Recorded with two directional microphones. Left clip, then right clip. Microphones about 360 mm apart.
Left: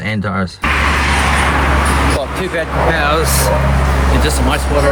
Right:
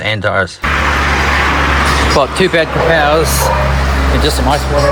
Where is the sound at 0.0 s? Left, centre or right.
Centre.